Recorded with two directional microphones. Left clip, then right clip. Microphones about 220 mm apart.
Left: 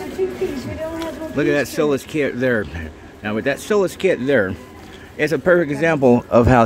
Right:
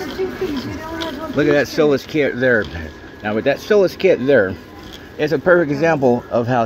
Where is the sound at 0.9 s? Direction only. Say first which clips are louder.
Right 5 dB; 15° left (ahead or behind).